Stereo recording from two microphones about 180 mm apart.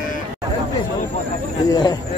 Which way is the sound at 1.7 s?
25° left (ahead or behind).